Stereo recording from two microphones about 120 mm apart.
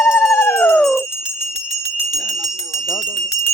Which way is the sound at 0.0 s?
25° left (ahead or behind).